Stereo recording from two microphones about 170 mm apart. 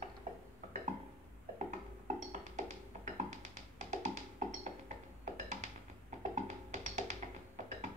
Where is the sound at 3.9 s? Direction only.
45° right (ahead or behind).